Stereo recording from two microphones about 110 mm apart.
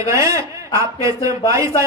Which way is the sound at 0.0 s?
30° right (ahead or behind).